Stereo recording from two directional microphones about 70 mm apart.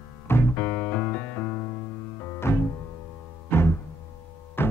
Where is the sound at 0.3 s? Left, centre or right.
Left.